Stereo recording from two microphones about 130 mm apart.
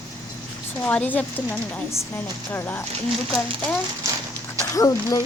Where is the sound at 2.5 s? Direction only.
15° left (ahead or behind).